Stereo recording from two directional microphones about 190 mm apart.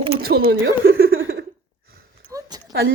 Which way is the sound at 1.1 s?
90° right.